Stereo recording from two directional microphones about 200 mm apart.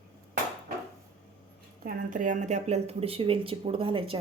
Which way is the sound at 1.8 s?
40° right (ahead or behind).